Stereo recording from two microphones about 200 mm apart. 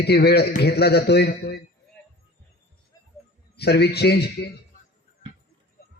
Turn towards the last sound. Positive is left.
turn(degrees=55)  # may be behind; listen again after turning